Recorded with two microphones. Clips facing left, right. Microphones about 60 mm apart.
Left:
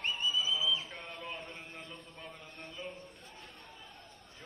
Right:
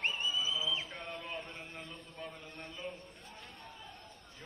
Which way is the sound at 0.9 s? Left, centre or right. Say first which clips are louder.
Right 1 dB; centre.